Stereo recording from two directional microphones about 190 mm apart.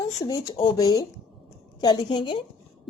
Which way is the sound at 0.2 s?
20° left (ahead or behind).